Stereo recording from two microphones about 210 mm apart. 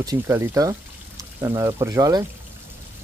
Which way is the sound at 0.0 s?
15° right (ahead or behind).